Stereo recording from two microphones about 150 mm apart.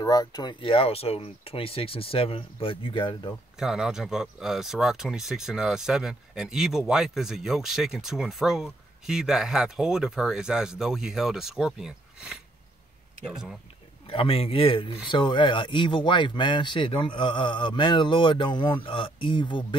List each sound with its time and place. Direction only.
0.0 s a man's voice: 25° left (ahead or behind)
3.5 s speech: 5° right (ahead or behind)
14.0 s a man's voice: 40° left (ahead or behind)